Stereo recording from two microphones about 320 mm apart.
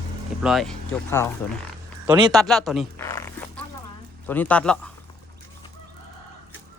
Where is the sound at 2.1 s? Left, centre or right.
Centre.